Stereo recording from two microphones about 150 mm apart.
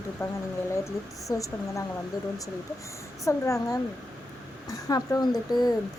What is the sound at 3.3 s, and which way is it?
Speech, 20° left (ahead or behind).